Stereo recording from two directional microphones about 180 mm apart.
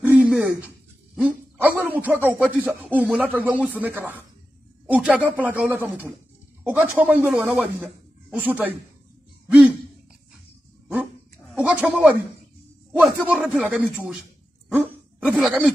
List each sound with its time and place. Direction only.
0.0 s a sound: 10° right (ahead or behind)
2.5 s speech: 10° right (ahead or behind)
11.5 s speech: 5° right (ahead or behind)